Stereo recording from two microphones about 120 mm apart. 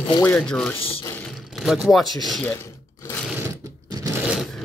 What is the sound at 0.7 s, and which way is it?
Speech, 50° left (ahead or behind).